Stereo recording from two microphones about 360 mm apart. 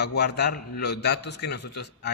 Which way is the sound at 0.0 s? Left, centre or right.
Left.